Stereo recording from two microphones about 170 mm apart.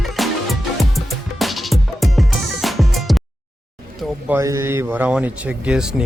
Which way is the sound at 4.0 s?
10° right (ahead or behind).